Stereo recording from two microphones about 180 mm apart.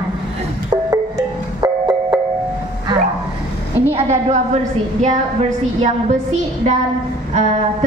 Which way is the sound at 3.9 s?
40° right (ahead or behind).